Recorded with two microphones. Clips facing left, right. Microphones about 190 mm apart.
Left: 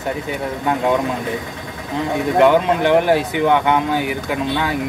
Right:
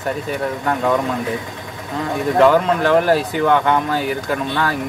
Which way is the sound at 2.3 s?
20° left (ahead or behind).